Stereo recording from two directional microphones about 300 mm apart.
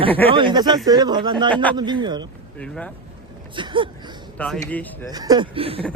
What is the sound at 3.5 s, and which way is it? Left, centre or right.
Speech, centre.